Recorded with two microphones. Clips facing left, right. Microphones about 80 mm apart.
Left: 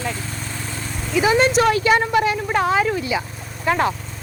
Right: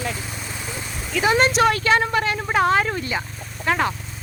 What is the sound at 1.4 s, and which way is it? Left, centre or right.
A woman's voice, centre.